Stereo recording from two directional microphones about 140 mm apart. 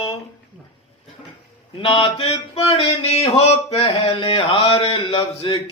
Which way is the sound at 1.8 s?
40° left (ahead or behind).